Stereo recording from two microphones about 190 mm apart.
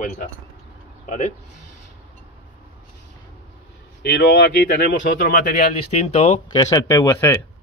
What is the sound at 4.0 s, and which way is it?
Speech, 60° left (ahead or behind).